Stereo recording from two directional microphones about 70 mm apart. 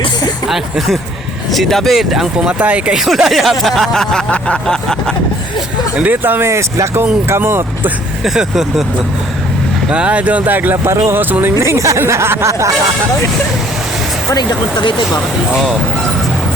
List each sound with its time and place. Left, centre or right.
0.4 s speech: centre
2.6 s speech: centre
3.0 s speech: centre
4.3 s a sound: centre
6.0 s speech: right
6.4 s speech: right
8.2 s speech: centre
9.9 s speech: centre
11.6 s speech: right
14.3 s speech: left